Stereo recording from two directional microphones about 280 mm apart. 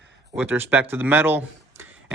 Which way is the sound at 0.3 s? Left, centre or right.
Centre.